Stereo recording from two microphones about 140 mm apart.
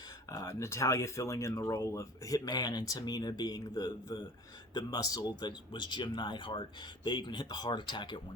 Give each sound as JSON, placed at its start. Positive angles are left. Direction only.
{"t": 0.3, "sound": "speech", "side_deg": 25}